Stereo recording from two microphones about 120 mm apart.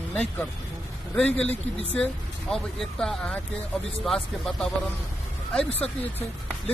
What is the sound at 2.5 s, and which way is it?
Speech, centre (ahead or behind).